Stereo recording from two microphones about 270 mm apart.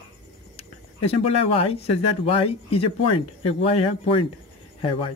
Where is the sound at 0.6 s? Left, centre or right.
Left.